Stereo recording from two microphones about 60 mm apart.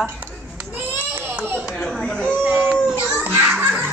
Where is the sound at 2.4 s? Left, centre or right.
Centre.